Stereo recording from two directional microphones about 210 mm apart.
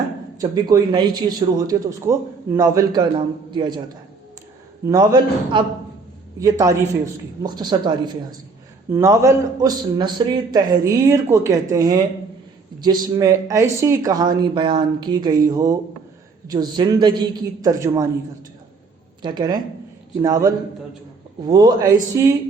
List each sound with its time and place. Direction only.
0.3 s a man's voice: 20° right (ahead or behind)
4.9 s a man's voice: 20° right (ahead or behind)
19.2 s a man's voice: 20° right (ahead or behind)